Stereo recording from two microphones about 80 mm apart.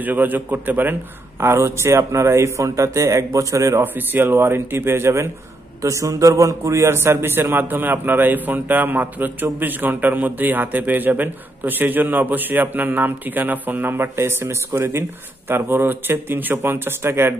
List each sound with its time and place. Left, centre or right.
0.0 s a man's voice: right
3.8 s a man's voice: right